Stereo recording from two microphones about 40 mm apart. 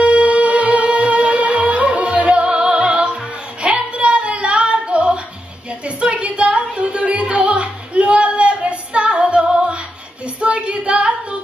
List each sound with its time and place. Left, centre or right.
0.0 s music: right
3.6 s female singing: right
5.9 s music: right
10.2 s a sound: right